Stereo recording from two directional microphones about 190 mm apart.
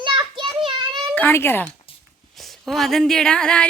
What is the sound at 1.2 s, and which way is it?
Speech, 15° left (ahead or behind).